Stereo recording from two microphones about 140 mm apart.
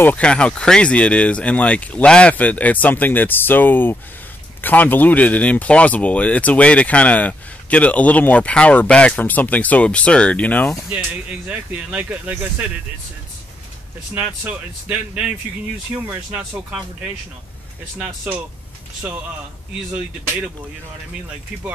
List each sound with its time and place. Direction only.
0.0 s speech: 10° left (ahead or behind)
10.9 s speech: 10° right (ahead or behind)
14.1 s speech: 10° right (ahead or behind)
17.9 s speech: 10° right (ahead or behind)